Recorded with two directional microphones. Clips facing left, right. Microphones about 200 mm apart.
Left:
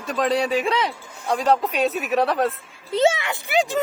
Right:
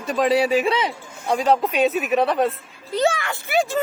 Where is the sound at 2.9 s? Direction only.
25° left (ahead or behind).